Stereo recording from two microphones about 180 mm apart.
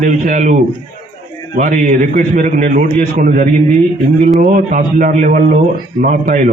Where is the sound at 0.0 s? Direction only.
45° right (ahead or behind).